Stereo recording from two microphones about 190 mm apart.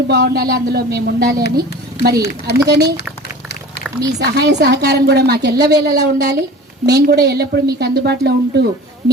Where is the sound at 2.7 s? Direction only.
60° right (ahead or behind).